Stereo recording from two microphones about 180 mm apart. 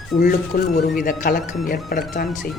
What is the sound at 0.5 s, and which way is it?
Speech, 50° left (ahead or behind).